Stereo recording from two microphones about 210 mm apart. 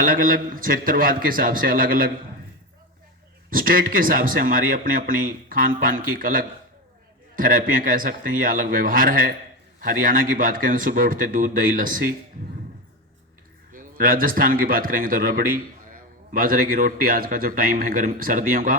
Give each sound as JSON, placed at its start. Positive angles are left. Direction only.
{"t": 0.0, "sound": "a man's voice", "side_deg": -40}
{"t": 3.5, "sound": "a man's voice", "side_deg": -40}
{"t": 13.7, "sound": "a man's voice", "side_deg": -40}